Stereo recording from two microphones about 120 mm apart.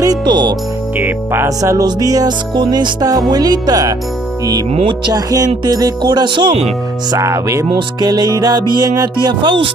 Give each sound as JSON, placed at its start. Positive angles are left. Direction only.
{"t": 0.0, "sound": "music", "side_deg": -35}
{"t": 0.9, "sound": "speech", "side_deg": -15}
{"t": 1.6, "sound": "music", "side_deg": -30}
{"t": 4.7, "sound": "music", "side_deg": -40}
{"t": 7.1, "sound": "music", "side_deg": -25}